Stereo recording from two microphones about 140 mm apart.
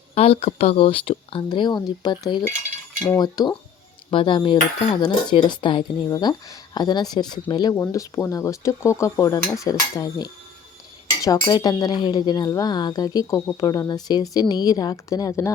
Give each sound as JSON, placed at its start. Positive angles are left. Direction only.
{"t": 0.1, "sound": "dishes", "side_deg": 45}
{"t": 3.2, "sound": "speech", "side_deg": 30}
{"t": 4.1, "sound": "dishes", "side_deg": 35}
{"t": 7.8, "sound": "speech", "side_deg": 20}